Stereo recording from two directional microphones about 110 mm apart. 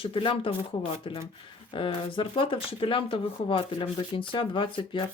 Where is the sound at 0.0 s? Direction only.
50° left (ahead or behind).